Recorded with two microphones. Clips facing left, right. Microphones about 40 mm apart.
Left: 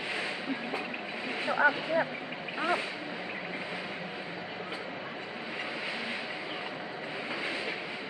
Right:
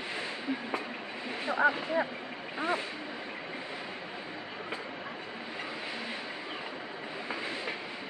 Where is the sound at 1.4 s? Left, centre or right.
Centre.